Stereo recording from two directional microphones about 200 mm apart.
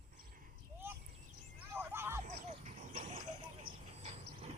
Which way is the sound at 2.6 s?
35° right (ahead or behind).